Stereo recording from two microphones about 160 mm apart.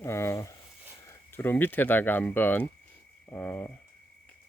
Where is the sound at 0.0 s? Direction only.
15° left (ahead or behind).